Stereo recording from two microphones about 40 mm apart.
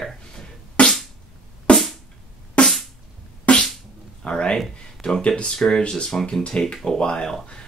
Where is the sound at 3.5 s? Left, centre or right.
Left.